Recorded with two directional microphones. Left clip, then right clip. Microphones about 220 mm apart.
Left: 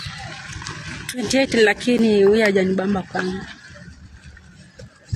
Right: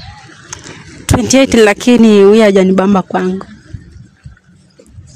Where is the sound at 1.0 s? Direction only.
50° right (ahead or behind).